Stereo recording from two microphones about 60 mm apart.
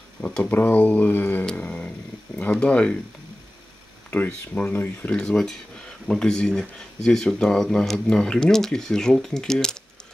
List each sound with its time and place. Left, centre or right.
0.2 s speech: left
1.4 s speech: centre
4.1 s speech: left
5.1 s speech: centre